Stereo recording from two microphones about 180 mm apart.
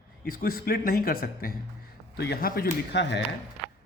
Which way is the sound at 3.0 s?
75° left (ahead or behind).